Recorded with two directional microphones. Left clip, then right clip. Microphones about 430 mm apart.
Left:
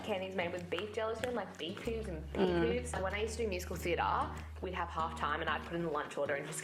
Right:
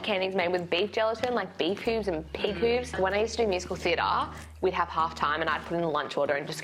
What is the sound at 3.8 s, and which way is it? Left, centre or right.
A woman's voice, right.